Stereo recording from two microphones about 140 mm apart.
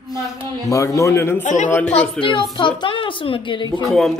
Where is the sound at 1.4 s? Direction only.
65° left (ahead or behind).